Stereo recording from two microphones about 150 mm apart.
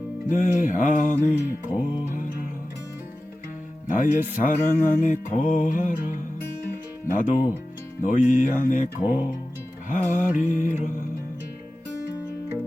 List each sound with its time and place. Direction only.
0.3 s music: 55° left (ahead or behind)
1.7 s music: 10° right (ahead or behind)
3.8 s music: 60° left (ahead or behind)
9.0 s music: 10° right (ahead or behind)
9.9 s music: 60° left (ahead or behind)